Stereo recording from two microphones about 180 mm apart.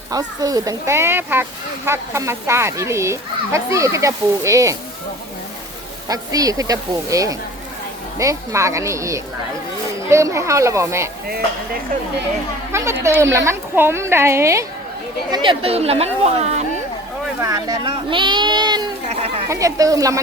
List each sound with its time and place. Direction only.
0.1 s speech: 20° right (ahead or behind)
6.1 s speech: 20° right (ahead or behind)
12.7 s speech: 15° right (ahead or behind)
15.3 s speech: 25° right (ahead or behind)
17.4 s speech: 20° right (ahead or behind)
19.0 s speech: 35° right (ahead or behind)
19.5 s speech: 20° right (ahead or behind)